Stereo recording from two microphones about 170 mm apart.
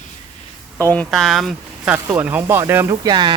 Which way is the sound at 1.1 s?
Centre (ahead or behind).